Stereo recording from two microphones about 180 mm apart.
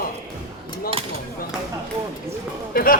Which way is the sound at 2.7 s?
55° left (ahead or behind).